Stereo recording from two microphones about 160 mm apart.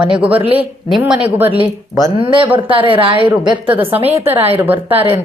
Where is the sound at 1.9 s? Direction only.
25° right (ahead or behind).